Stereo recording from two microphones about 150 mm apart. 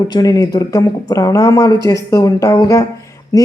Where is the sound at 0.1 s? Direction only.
25° left (ahead or behind).